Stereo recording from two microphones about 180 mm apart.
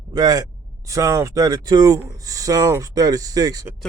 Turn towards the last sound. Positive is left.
turn(degrees=-20)  # may be behind; listen again after turning